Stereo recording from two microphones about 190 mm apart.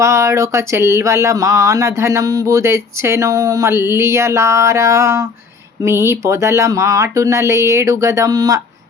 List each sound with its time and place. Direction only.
0.0 s speech: 15° right (ahead or behind)